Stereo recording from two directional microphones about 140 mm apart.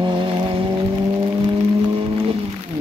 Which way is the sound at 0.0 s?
35° right (ahead or behind).